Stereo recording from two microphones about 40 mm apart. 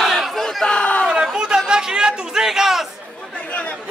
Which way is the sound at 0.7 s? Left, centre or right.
Left.